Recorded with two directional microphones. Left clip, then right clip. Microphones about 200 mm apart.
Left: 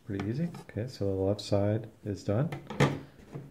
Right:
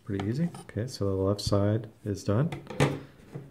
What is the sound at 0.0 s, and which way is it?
Speech, 20° right (ahead or behind).